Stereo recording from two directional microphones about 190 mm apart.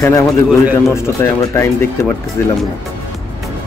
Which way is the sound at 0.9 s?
15° left (ahead or behind).